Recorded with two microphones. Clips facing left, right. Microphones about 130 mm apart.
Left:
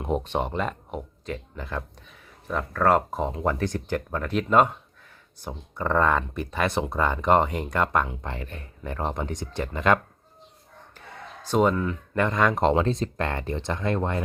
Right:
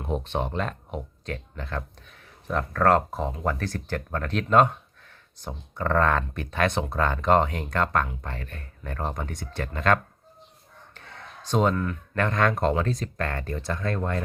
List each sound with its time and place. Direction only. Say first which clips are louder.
0.0 s speech: left 2 dB; 15° left (ahead or behind)
12.6 s speech: left 3 dB; 25° left (ahead or behind)